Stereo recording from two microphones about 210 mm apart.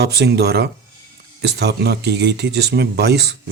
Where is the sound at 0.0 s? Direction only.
50° right (ahead or behind).